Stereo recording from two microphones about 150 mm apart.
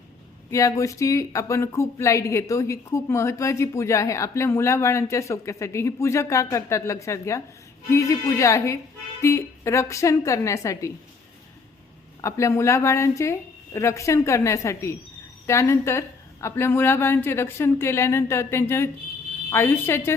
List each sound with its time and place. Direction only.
0.5 s speech: 20° left (ahead or behind)
12.2 s a woman's voice: 20° left (ahead or behind)